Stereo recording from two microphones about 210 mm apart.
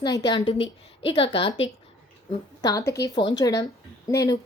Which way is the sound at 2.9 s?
15° left (ahead or behind).